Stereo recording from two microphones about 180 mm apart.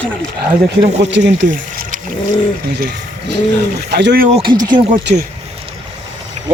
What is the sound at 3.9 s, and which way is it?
Speech, 70° right (ahead or behind).